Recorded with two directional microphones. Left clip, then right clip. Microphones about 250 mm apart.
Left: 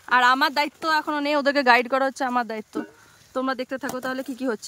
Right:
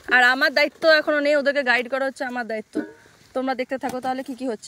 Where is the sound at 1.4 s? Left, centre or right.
Centre.